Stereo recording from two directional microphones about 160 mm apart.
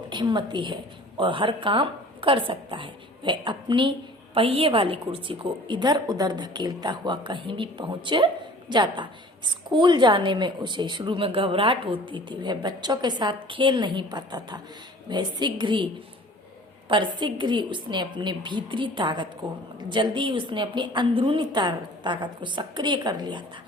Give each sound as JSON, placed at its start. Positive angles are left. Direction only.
{"t": 0.1, "sound": "a woman's voice", "side_deg": -30}
{"t": 16.9, "sound": "a woman's voice", "side_deg": -30}